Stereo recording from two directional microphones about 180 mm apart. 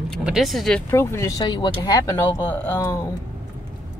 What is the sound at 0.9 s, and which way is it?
Speech, 15° left (ahead or behind).